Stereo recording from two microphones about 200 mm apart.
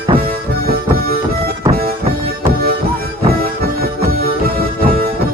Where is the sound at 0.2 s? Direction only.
50° right (ahead or behind).